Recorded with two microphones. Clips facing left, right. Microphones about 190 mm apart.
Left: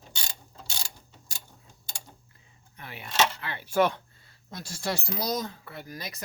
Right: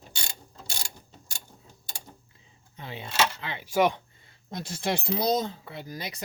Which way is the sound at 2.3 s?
20° right (ahead or behind).